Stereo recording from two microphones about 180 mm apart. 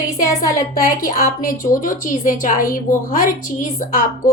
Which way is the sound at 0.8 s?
50° left (ahead or behind).